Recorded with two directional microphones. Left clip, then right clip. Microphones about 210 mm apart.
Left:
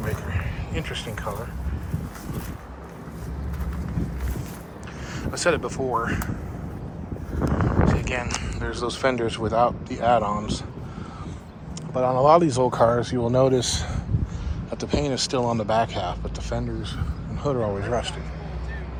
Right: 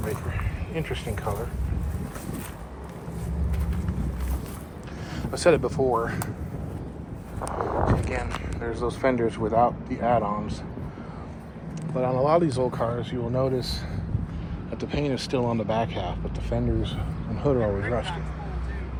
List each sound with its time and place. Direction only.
0.7 s speech: 5° left (ahead or behind)
5.1 s speech: centre (ahead or behind)
8.0 s speech: 10° left (ahead or behind)
11.9 s speech: 15° left (ahead or behind); by 13.8 s 35° left (ahead or behind)
14.7 s speech: 10° left (ahead or behind)